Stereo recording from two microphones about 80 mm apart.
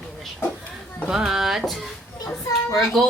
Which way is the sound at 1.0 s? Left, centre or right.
Centre.